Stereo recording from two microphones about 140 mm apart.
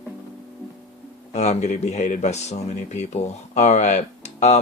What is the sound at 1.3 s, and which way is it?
Speech, 50° left (ahead or behind).